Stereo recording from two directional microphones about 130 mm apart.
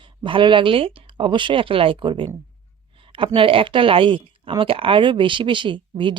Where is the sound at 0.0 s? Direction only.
40° right (ahead or behind).